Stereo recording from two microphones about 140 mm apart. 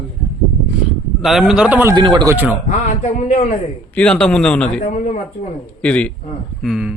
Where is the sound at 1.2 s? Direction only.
Centre (ahead or behind).